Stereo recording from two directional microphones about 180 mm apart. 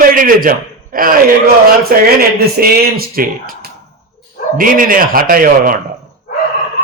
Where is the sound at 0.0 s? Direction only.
50° right (ahead or behind).